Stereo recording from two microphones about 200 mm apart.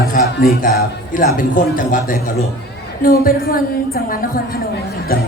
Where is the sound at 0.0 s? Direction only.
50° left (ahead or behind).